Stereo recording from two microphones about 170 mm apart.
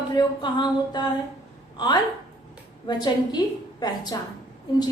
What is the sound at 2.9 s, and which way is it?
Speech, 25° left (ahead or behind).